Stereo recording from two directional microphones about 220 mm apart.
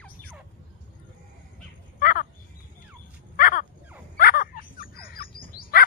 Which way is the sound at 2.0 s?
40° left (ahead or behind).